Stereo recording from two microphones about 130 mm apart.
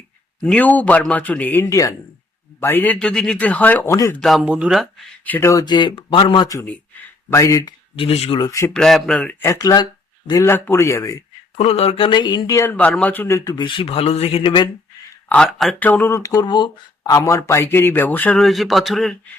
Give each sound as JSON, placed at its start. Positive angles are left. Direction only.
{"t": 0.4, "sound": "speech", "side_deg": 10}
{"t": 3.9, "sound": "speech", "side_deg": 25}
{"t": 4.2, "sound": "speech", "side_deg": 0}
{"t": 5.2, "sound": "speech", "side_deg": 15}
{"t": 7.9, "sound": "speech", "side_deg": 50}
{"t": 8.4, "sound": "speech", "side_deg": 25}
{"t": 8.7, "sound": "speech", "side_deg": 5}
{"t": 9.4, "sound": "speech", "side_deg": 25}
{"t": 11.5, "sound": "speech", "side_deg": 50}
{"t": 12.7, "sound": "speech", "side_deg": 10}
{"t": 15.3, "sound": "speech", "side_deg": 5}
{"t": 15.8, "sound": "speech", "side_deg": 15}
{"t": 18.3, "sound": "speech", "side_deg": 0}